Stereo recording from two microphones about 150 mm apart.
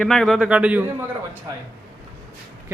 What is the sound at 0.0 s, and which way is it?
Speech, 5° left (ahead or behind).